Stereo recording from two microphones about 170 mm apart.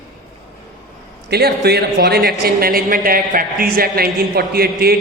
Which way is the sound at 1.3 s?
70° right (ahead or behind).